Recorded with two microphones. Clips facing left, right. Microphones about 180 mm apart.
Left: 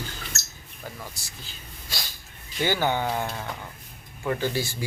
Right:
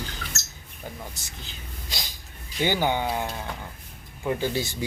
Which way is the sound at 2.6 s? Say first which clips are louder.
Even; 15° right (ahead or behind).